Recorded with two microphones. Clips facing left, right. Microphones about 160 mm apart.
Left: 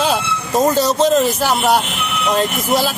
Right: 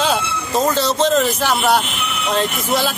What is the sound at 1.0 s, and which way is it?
Speech, 5° left (ahead or behind).